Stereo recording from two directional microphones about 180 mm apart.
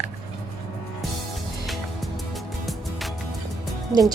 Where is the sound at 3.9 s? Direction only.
20° right (ahead or behind).